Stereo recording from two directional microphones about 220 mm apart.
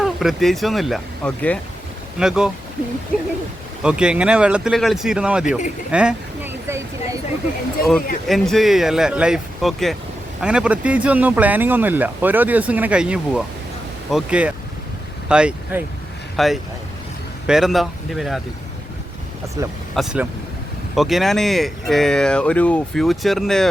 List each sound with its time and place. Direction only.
0.0 s speech: centre (ahead or behind)
3.8 s speech: 5° right (ahead or behind)
5.5 s speech: 35° left (ahead or behind)
5.9 s a sound: 5° right (ahead or behind)
8.3 s speech: centre (ahead or behind)
19.6 s speech: 15° right (ahead or behind)
20.0 s speech: centre (ahead or behind)